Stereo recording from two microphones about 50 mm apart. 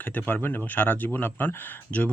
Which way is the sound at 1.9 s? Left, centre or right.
Left.